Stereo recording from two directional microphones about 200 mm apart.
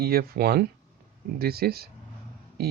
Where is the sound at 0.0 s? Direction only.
50° right (ahead or behind).